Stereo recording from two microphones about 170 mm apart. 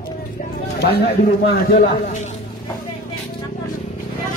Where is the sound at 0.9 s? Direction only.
65° left (ahead or behind).